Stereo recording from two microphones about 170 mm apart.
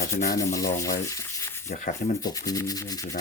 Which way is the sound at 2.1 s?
20° left (ahead or behind).